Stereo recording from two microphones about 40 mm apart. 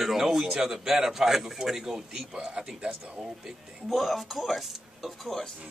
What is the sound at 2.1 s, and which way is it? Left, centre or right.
Speech, right.